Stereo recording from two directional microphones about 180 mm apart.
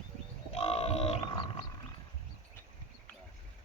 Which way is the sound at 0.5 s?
35° left (ahead or behind).